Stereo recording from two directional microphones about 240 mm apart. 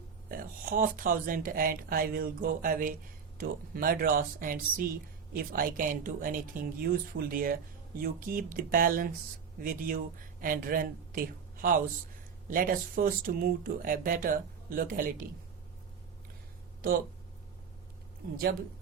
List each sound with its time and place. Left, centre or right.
0.3 s speech: right